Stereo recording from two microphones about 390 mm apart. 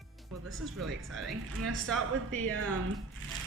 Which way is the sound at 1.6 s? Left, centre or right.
Right.